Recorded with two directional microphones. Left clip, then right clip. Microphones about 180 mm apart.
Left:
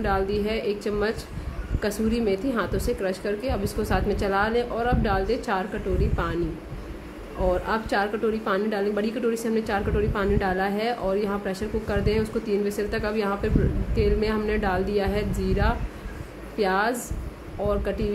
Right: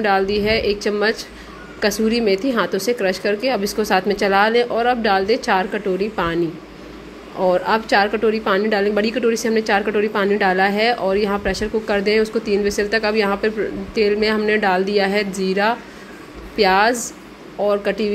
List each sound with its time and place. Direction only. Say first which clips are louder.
0.0 s a woman's voice: right 8 dB; 15° right (ahead or behind)
7.4 s a woman's voice: right 8 dB; 15° right (ahead or behind)